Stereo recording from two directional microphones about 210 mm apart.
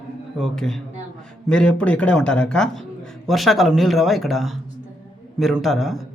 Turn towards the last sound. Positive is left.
turn(degrees=0)  # may be behind; listen again after turning